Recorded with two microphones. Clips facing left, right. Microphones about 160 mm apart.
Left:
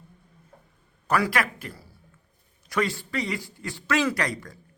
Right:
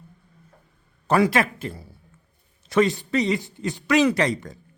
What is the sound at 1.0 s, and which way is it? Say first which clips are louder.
Speech: right 5 dB; 25° right (ahead or behind).